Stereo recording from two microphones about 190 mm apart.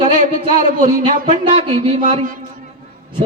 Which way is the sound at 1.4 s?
25° right (ahead or behind).